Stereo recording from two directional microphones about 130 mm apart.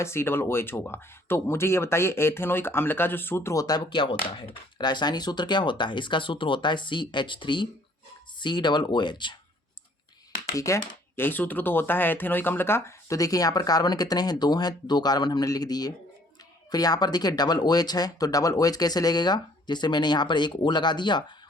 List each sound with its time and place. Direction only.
0.0 s speech: 20° left (ahead or behind); by 9.3 s 35° left (ahead or behind)
10.5 s speech: 25° left (ahead or behind)